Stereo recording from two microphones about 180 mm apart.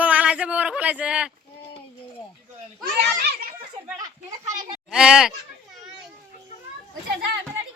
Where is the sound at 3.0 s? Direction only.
60° right (ahead or behind).